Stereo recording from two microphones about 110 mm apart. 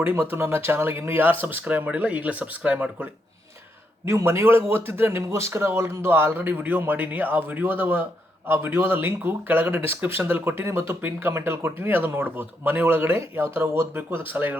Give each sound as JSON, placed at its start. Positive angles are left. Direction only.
{"t": 0.0, "sound": "speech", "side_deg": -20}
{"t": 4.0, "sound": "speech", "side_deg": -25}